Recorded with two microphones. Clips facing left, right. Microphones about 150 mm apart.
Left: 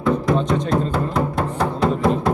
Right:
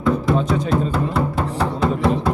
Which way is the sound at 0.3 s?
5° right (ahead or behind).